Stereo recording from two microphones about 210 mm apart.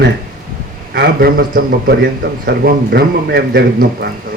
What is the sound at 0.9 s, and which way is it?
A man's voice, 50° right (ahead or behind).